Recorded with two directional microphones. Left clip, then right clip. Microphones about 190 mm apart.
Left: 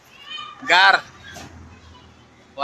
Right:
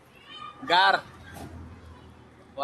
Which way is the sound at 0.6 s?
15° left (ahead or behind).